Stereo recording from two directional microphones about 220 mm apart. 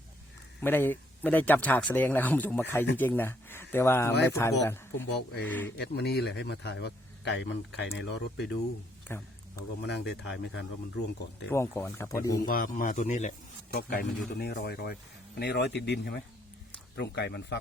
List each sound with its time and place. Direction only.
0.6 s speech: 10° left (ahead or behind)
5.7 s a man's voice: 50° left (ahead or behind)
9.0 s a sound: 10° left (ahead or behind)
9.8 s a man's voice: 50° left (ahead or behind)
11.5 s speech: 10° left (ahead or behind)
12.5 s speech: 40° left (ahead or behind)
13.7 s a man's voice: 45° left (ahead or behind)